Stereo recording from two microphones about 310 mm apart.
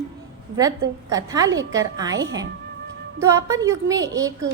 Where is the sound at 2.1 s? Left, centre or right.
Right.